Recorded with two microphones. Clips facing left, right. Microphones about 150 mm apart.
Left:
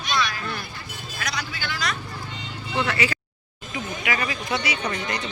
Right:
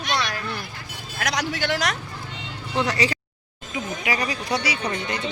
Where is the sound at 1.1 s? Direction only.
90° right.